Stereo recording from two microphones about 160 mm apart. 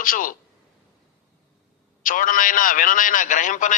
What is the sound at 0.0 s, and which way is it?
Speech, 60° left (ahead or behind).